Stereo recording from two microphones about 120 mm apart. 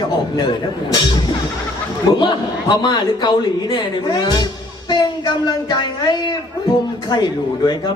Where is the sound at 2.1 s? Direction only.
40° left (ahead or behind).